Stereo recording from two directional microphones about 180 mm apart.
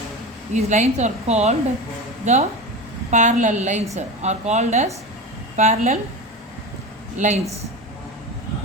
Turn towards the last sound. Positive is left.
turn(degrees=-40)  # may be behind; listen again after turning